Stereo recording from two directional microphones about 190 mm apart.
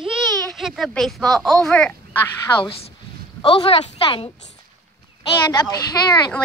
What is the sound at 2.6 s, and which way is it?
Speech, 30° left (ahead or behind).